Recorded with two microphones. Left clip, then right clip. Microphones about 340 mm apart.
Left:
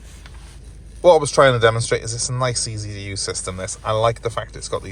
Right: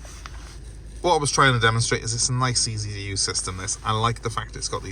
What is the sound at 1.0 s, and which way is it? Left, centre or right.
Speech, centre.